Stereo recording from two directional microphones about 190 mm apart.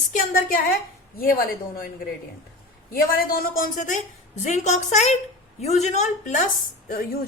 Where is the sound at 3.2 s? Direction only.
50° left (ahead or behind).